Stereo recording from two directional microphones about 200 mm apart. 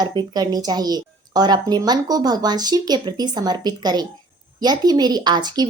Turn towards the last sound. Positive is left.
turn(degrees=-20)  # may be behind; listen again after turning